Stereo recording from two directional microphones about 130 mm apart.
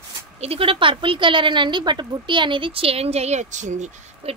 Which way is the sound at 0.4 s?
50° right (ahead or behind).